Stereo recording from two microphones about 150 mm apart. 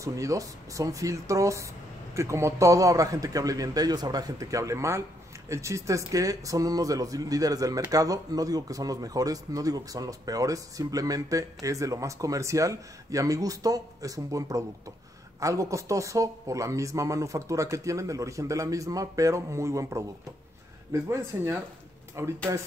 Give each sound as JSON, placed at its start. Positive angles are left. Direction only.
{"t": 0.0, "sound": "speech", "side_deg": -20}